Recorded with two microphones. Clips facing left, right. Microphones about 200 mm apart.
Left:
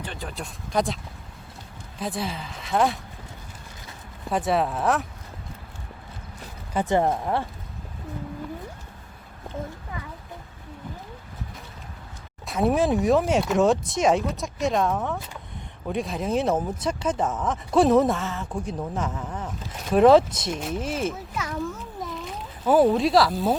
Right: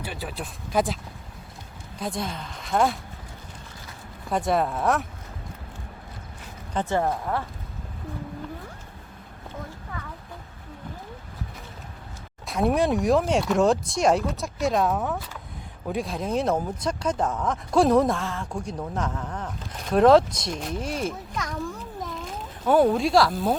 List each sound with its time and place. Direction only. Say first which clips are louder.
0.0 s speech: right 1 dB; 5° right (ahead or behind)
2.0 s speech: left 1 dB; 5° left (ahead or behind)
4.3 s speech: even; centre (ahead or behind)
6.7 s speech: left 3 dB; 15° left (ahead or behind)
12.5 s speech: left 1 dB; centre (ahead or behind)